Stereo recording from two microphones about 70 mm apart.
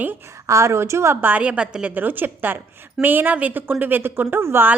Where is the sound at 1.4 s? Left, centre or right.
Centre.